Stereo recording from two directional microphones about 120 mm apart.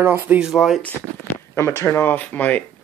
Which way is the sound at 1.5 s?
25° left (ahead or behind).